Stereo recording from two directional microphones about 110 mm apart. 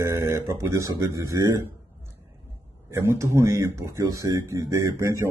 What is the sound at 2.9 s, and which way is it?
Speech, 25° right (ahead or behind).